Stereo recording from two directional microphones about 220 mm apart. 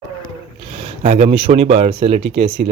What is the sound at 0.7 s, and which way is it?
Speech, 30° right (ahead or behind).